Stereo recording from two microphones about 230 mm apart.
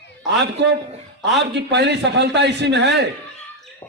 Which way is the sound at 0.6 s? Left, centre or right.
Right.